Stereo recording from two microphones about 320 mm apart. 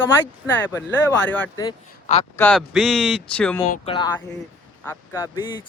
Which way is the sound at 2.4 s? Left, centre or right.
Centre.